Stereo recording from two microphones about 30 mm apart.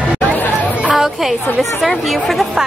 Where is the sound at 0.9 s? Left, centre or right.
Centre.